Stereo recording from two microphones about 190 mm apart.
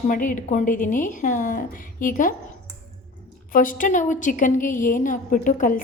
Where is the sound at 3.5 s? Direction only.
45° left (ahead or behind).